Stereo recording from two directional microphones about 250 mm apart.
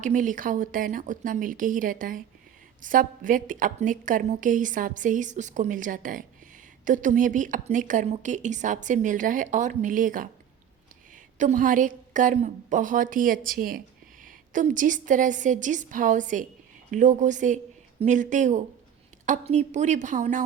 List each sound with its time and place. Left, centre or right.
0.0 s a woman's voice: right
11.3 s a woman's voice: right